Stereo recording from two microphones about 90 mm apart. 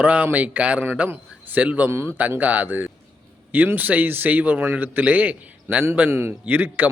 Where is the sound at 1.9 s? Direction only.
30° right (ahead or behind).